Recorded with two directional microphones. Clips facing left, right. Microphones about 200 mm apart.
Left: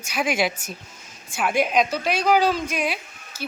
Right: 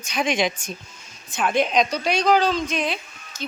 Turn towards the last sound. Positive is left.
turn(degrees=10)  # may be behind; listen again after turning